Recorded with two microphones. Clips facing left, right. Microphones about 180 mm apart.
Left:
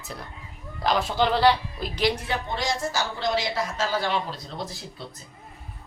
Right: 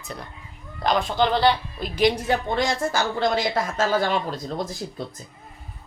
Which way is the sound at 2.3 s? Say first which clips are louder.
Right 5 dB; 50° right (ahead or behind).